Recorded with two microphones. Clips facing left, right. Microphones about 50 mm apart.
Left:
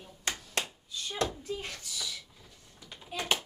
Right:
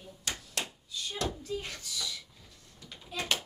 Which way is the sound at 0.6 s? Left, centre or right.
Left.